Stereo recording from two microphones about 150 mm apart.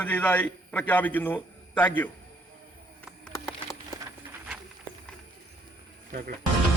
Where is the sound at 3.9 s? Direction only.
25° left (ahead or behind).